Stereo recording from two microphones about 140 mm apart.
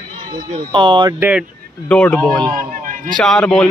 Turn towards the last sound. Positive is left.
turn(degrees=5)  # may be behind; listen again after turning